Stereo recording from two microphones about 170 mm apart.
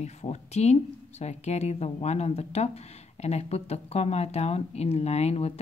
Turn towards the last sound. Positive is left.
turn(degrees=40)  # may be behind; listen again after turning